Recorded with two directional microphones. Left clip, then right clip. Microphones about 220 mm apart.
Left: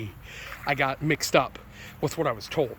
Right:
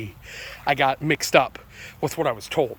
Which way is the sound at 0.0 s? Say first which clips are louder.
Right 3 dB; 20° right (ahead or behind).